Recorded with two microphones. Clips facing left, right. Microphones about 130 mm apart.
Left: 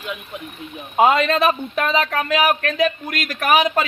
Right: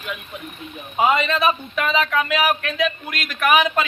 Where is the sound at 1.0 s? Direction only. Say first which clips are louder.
Left 3 dB; 55° left (ahead or behind).